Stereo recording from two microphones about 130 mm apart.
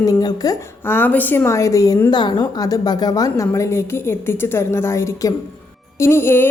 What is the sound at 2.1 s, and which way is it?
A woman's voice, 35° left (ahead or behind).